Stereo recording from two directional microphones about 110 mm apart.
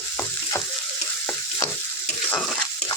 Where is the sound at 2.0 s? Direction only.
10° left (ahead or behind).